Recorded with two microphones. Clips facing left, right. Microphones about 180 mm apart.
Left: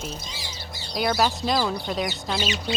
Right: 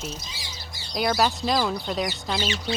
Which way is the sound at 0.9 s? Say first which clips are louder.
Even; centre (ahead or behind).